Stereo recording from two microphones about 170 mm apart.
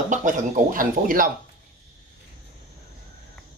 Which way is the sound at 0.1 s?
50° right (ahead or behind).